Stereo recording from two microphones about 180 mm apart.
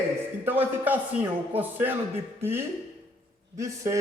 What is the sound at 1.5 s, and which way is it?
Speech, 10° right (ahead or behind).